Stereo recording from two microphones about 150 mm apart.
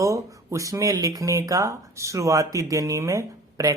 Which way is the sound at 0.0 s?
20° right (ahead or behind).